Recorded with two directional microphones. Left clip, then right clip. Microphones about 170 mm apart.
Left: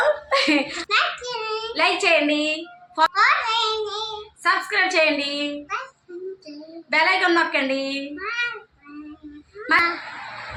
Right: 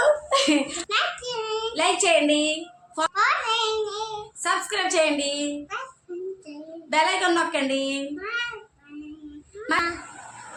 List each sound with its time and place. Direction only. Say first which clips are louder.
0.3 s a sound: left 2 dB; 15° right (ahead or behind)
0.9 s child singing: left 5 dB; centre (ahead or behind)
1.7 s a child's voice: left 2 dB; 10° right (ahead or behind)
3.1 s a sound: even; centre (ahead or behind)
4.4 s a woman's voice: left 5 dB; 10° right (ahead or behind)
6.9 s a woman's voice: left 3 dB; 10° right (ahead or behind)
8.1 s child singing: left 3 dB; centre (ahead or behind)
9.6 s speech: left 5 dB; 10° right (ahead or behind)